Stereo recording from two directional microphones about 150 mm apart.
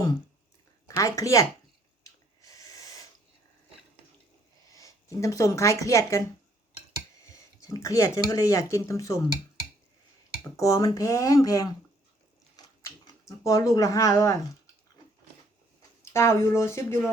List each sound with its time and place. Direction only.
0.9 s speech: 20° left (ahead or behind)
2.0 s snort: 20° left (ahead or behind)
4.7 s speech: 20° left (ahead or behind)
7.6 s speech: 20° left (ahead or behind)
10.6 s speech: 20° left (ahead or behind)
12.5 s a sound: 25° left (ahead or behind)
16.1 s speech: 15° left (ahead or behind)